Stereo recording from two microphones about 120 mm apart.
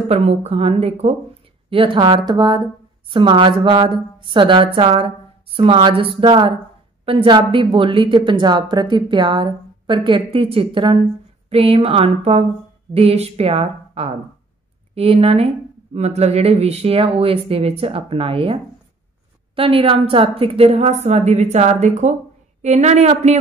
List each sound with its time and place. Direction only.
0.1 s speech: 60° right (ahead or behind)
1.7 s a woman's voice: 45° right (ahead or behind); by 23.3 s 70° right (ahead or behind)